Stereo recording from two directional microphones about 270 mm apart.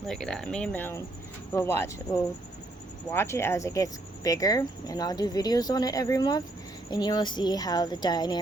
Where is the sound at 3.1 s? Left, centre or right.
Centre.